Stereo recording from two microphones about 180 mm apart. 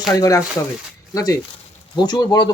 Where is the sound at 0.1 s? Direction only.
20° left (ahead or behind).